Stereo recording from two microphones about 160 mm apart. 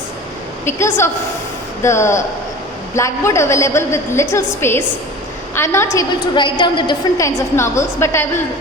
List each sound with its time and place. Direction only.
0.6 s a woman's voice: 15° left (ahead or behind)